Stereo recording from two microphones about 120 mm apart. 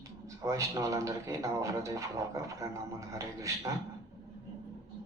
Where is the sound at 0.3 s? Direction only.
25° right (ahead or behind).